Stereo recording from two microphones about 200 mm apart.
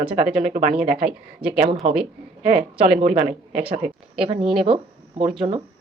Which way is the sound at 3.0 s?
30° right (ahead or behind).